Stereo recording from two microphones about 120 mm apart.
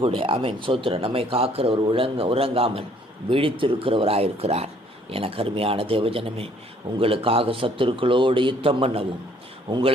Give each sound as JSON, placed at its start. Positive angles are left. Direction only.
{"t": 0.0, "sound": "speech", "side_deg": -45}
{"t": 9.6, "sound": "speech", "side_deg": -40}